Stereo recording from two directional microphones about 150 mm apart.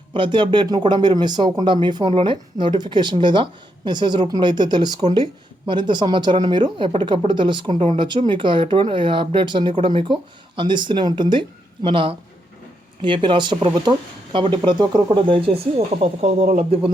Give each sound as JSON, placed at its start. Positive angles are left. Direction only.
{"t": 0.1, "sound": "speech", "side_deg": -35}